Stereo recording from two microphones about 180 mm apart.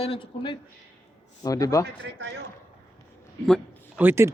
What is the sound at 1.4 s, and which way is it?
Speech, 20° left (ahead or behind).